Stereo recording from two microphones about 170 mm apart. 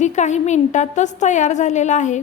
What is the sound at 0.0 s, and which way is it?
A woman's voice, 45° left (ahead or behind).